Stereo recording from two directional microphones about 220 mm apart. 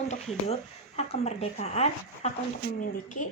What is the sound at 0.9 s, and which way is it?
Speech, 30° left (ahead or behind).